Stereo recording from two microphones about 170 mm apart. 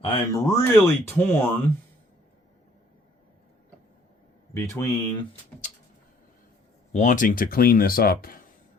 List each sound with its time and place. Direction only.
0.0 s speech: 25° left (ahead or behind)
0.9 s speech: 15° left (ahead or behind)
4.5 s speech: 20° left (ahead or behind)
6.9 s speech: 45° left (ahead or behind)